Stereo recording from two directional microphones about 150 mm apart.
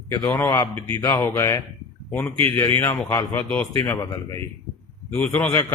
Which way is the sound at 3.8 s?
20° left (ahead or behind).